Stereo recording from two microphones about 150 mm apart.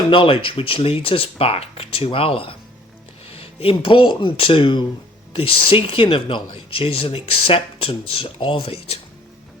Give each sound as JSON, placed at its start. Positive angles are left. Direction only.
{"t": 0.1, "sound": "speech", "side_deg": 35}